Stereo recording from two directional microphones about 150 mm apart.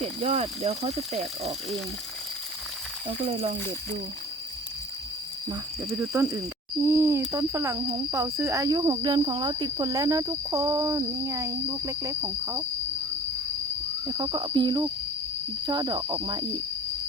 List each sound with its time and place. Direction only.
0.0 s speech: 40° right (ahead or behind)
6.0 s speech: 15° right (ahead or behind)
14.0 s speech: 25° right (ahead or behind)